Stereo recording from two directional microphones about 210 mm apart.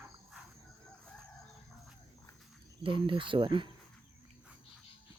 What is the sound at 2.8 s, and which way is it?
Cricket, 25° right (ahead or behind).